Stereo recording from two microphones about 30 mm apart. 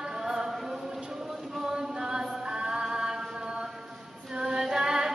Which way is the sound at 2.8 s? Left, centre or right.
Centre.